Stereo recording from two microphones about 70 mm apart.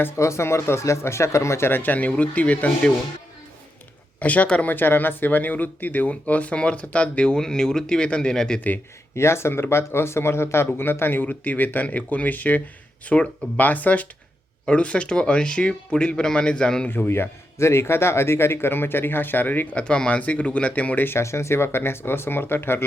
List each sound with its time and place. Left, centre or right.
0.2 s speech: left; by 2.9 s centre
4.2 s speech: centre
9.1 s speech: left; by 16.9 s centre
16.9 s speech: left
19.8 s speech: centre
21.2 s speech: left